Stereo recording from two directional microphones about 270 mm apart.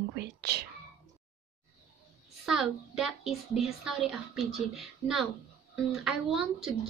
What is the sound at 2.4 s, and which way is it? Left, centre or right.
A woman's voice, centre.